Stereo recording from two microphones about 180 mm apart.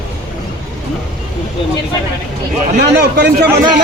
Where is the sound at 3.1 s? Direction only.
60° right (ahead or behind).